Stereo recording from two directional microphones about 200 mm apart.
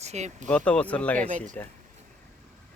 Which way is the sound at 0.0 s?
35° right (ahead or behind).